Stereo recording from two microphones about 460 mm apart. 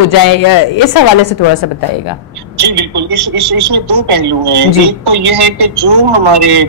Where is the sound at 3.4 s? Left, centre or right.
Right.